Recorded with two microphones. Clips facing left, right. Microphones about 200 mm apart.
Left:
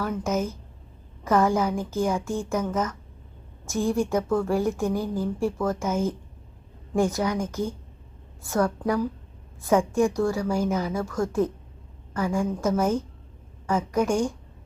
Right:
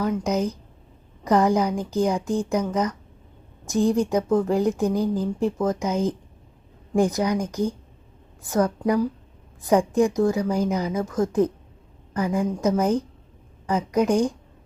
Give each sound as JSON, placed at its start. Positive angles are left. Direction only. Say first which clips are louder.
{"t": 0.0, "sound": "a woman's voice", "louder": "right 3 dB", "side_deg": -15}